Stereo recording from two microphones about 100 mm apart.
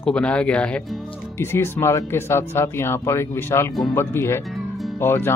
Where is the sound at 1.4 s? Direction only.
25° left (ahead or behind).